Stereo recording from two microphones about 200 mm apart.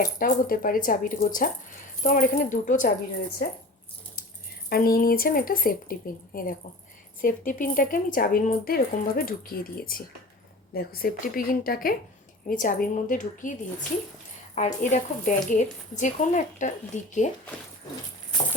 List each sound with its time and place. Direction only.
0.2 s speech: 45° left (ahead or behind)
4.7 s a woman's voice: 50° left (ahead or behind)